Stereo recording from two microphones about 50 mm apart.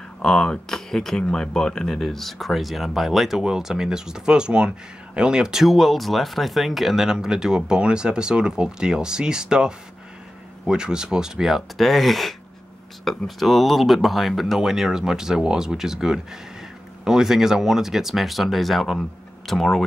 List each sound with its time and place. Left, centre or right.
0.2 s speech: centre
11.8 s speech: centre